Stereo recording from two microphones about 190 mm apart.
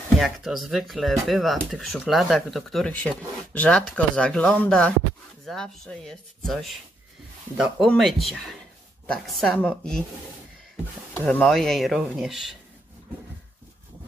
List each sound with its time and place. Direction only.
0.2 s speech: centre (ahead or behind)
11.2 s speech: 5° left (ahead or behind)